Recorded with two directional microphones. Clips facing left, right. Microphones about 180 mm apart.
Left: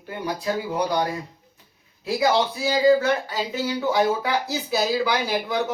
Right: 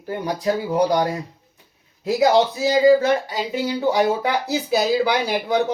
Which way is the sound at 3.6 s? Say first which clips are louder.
Right 2 dB; 30° right (ahead or behind).